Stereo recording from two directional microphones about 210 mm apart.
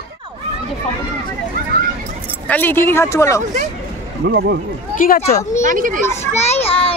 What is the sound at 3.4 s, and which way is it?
Speech, 35° right (ahead or behind).